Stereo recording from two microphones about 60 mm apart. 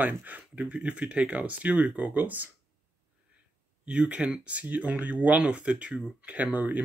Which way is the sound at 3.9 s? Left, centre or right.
Right.